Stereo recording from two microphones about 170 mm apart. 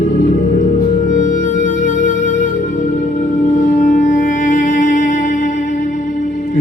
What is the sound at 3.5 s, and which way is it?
Music, 50° left (ahead or behind).